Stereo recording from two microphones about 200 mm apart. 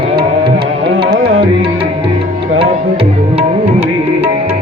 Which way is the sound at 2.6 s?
25° right (ahead or behind).